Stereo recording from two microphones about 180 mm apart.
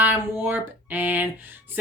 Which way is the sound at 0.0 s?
10° right (ahead or behind).